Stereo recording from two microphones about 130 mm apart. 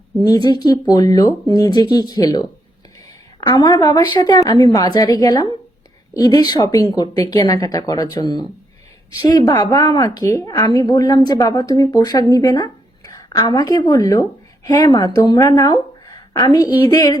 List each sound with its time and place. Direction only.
0.3 s a woman's voice: 30° left (ahead or behind)